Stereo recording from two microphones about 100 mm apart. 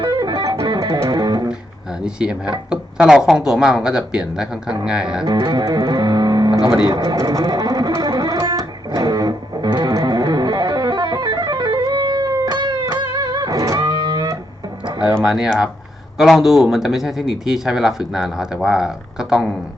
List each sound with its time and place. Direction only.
0.0 s music: 45° right (ahead or behind)
2.0 s speech: 10° right (ahead or behind)
5.2 s speech: 45° right (ahead or behind)
8.9 s music: 40° right (ahead or behind)
15.2 s speech: 5° right (ahead or behind)